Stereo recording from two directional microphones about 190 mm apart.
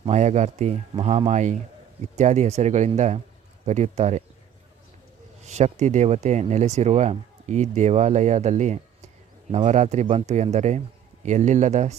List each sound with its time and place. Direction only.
0.0 s speech: 35° right (ahead or behind)
5.5 s speech: 35° right (ahead or behind)